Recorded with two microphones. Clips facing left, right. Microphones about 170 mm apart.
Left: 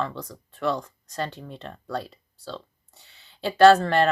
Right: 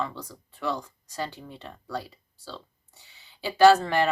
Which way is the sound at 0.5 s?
65° left (ahead or behind).